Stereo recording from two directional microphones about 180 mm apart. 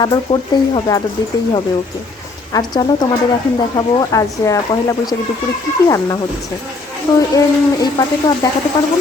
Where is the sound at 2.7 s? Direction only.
20° left (ahead or behind).